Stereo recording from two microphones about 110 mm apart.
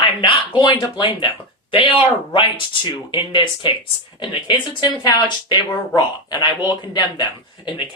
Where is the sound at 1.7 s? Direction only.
50° left (ahead or behind).